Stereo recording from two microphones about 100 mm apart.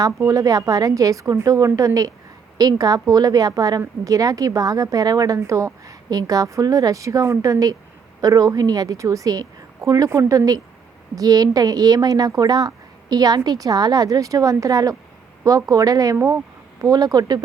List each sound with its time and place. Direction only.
0.0 s a woman's voice: 35° right (ahead or behind)